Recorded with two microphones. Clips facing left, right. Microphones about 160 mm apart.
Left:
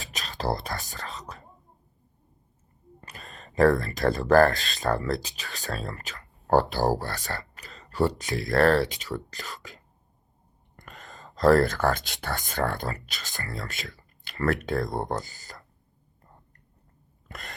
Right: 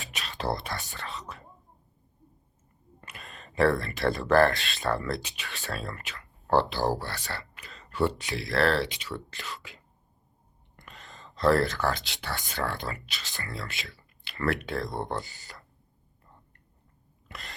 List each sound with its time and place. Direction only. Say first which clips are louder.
0.0 s whispering: left 2 dB; 40° left (ahead or behind)
3.0 s speech: left 1 dB; 35° left (ahead or behind)
17.2 s a sound: left 2 dB; 45° left (ahead or behind)